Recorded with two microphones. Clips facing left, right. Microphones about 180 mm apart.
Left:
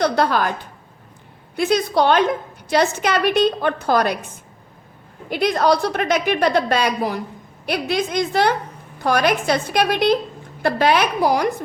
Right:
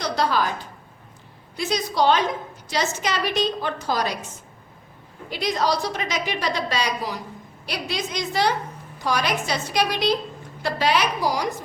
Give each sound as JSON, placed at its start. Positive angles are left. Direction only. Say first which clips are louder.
{"t": 0.0, "sound": "a woman's voice", "louder": "left 5 dB", "side_deg": 55}
{"t": 1.5, "sound": "a woman's voice", "louder": "left 6 dB", "side_deg": 60}
{"t": 5.3, "sound": "a woman's voice", "louder": "left 6 dB", "side_deg": 60}